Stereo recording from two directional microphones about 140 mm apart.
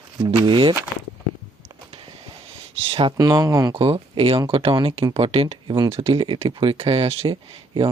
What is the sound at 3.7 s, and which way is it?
Speech, 40° right (ahead or behind).